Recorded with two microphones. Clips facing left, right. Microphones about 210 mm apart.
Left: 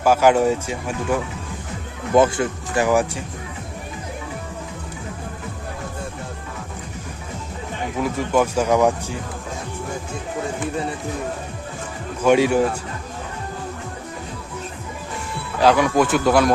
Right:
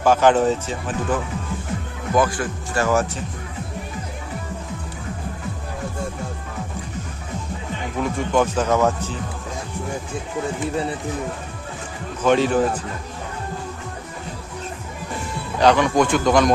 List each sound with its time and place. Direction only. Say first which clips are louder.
0.0 s speech: even; 10° left (ahead or behind)
2.1 s speech: left 4 dB; 25° left (ahead or behind)
8.0 s speech: even; 5° left (ahead or behind)
12.2 s speech: left 1 dB; 10° left (ahead or behind)
15.6 s speech: even; 5° left (ahead or behind)